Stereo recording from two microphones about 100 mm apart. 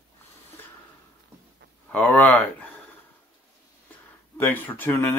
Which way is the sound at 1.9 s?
15° left (ahead or behind).